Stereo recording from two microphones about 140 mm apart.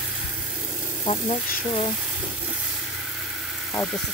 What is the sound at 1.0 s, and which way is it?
Speech, 40° left (ahead or behind).